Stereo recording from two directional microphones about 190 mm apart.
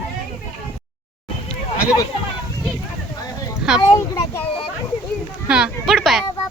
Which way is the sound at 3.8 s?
15° left (ahead or behind).